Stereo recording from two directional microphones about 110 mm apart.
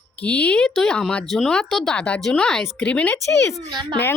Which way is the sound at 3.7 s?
40° right (ahead or behind).